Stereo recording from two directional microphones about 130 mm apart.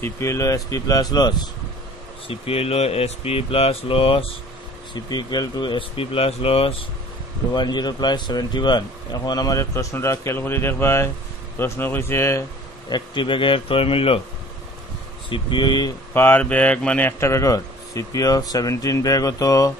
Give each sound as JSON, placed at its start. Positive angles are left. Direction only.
{"t": 0.0, "sound": "a man's voice", "side_deg": 20}
{"t": 2.2, "sound": "speech", "side_deg": 50}
{"t": 4.9, "sound": "speech", "side_deg": 35}
{"t": 7.5, "sound": "a man's voice", "side_deg": 35}
{"t": 12.9, "sound": "speech", "side_deg": 35}
{"t": 15.2, "sound": "speech", "side_deg": 40}
{"t": 16.1, "sound": "a man's voice", "side_deg": 15}